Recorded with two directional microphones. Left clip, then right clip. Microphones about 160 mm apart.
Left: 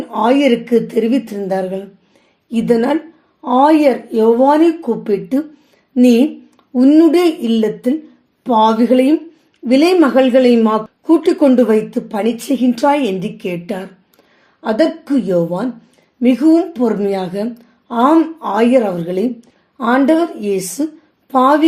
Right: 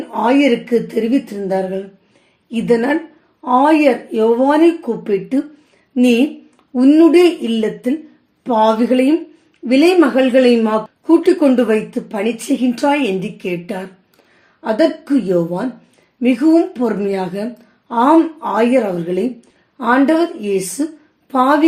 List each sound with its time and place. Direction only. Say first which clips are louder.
0.1 s a woman's voice: left 1 dB; 30° left (ahead or behind)